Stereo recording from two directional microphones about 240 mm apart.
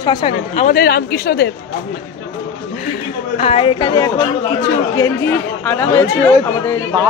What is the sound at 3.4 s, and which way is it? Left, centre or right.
Speech, left.